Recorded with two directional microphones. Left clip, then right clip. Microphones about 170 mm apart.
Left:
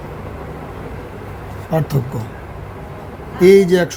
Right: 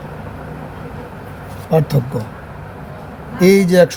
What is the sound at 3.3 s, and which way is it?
Speech, 25° right (ahead or behind).